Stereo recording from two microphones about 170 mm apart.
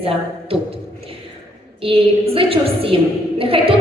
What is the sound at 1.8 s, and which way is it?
A woman's voice, 35° right (ahead or behind).